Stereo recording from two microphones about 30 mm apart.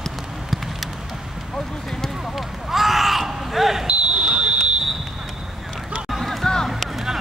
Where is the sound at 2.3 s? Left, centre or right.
Centre.